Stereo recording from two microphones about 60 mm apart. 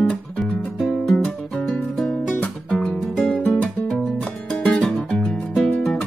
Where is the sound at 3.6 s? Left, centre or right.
Left; by 5.7 s centre.